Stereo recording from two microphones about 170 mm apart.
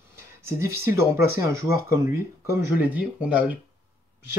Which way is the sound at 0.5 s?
15° right (ahead or behind).